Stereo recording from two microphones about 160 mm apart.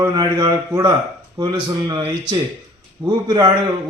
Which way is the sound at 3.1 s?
25° right (ahead or behind).